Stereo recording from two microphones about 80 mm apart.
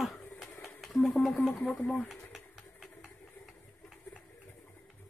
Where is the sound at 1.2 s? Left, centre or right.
Centre.